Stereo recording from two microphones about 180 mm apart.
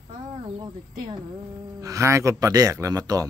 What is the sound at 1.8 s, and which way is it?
Speech, 15° right (ahead or behind).